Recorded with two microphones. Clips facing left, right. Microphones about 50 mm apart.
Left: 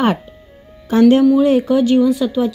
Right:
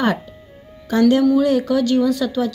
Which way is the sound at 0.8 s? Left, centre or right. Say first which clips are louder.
Left 4 dB; left.